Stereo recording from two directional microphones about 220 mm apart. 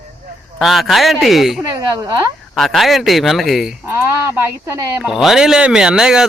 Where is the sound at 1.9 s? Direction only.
15° right (ahead or behind).